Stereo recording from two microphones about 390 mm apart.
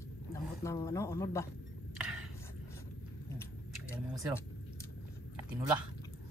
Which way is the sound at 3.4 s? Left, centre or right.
Centre.